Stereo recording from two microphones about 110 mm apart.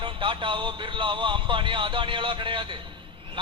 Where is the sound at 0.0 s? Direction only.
50° right (ahead or behind).